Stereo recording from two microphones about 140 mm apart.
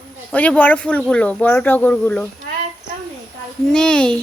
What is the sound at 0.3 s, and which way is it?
Speech, 10° left (ahead or behind).